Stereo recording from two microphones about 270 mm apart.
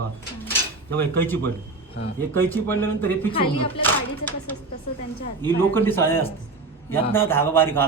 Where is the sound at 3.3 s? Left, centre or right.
Centre.